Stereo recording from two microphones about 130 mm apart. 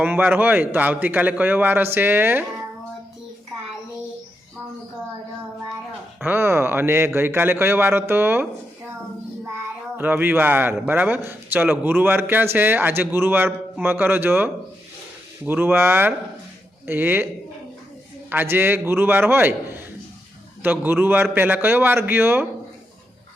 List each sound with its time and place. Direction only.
0.0 s speech: 15° right (ahead or behind)
6.2 s speech: 20° right (ahead or behind)
10.0 s speech: 15° right (ahead or behind)
18.3 s speech: 15° right (ahead or behind)